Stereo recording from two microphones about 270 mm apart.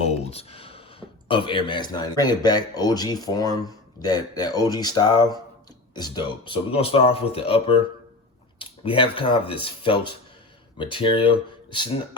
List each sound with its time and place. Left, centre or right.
0.0 s speech: left